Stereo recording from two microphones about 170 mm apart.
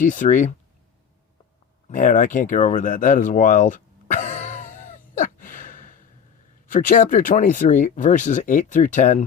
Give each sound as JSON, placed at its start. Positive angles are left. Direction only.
{"t": 0.0, "sound": "speech", "side_deg": 50}
{"t": 1.9, "sound": "a sound", "side_deg": 50}
{"t": 6.7, "sound": "speech", "side_deg": 55}